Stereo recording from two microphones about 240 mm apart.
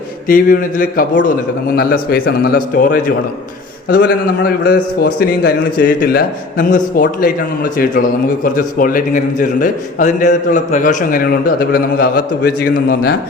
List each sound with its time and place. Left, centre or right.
0.3 s a man's voice: left